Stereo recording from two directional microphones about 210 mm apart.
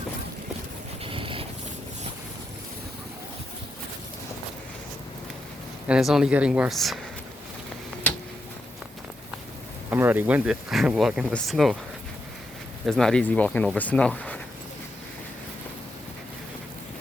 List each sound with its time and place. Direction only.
1.0 s boat: 25° right (ahead or behind)
5.9 s speech: centre (ahead or behind)
9.9 s speech: 10° right (ahead or behind)
12.8 s speech: centre (ahead or behind)